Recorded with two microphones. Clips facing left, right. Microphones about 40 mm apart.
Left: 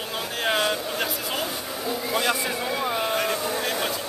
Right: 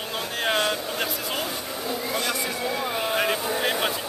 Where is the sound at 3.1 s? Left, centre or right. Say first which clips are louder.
Right 1 dB; centre.